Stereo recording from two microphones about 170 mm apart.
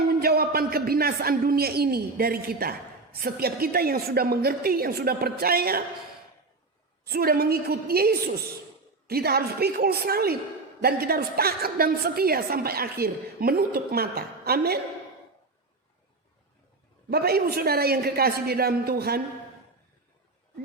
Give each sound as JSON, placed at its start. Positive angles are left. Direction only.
{"t": 0.1, "sound": "a man's voice", "side_deg": -65}
{"t": 7.0, "sound": "a man's voice", "side_deg": -65}
{"t": 17.1, "sound": "a man's voice", "side_deg": -65}